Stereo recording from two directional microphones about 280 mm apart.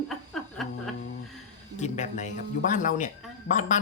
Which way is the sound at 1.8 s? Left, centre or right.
Left.